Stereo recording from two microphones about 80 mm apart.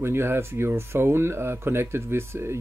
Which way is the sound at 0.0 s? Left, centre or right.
Right.